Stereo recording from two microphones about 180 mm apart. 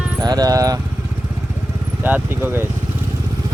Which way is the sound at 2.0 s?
10° right (ahead or behind).